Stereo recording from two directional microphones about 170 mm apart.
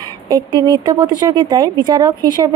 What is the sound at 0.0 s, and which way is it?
Speech, 25° right (ahead or behind).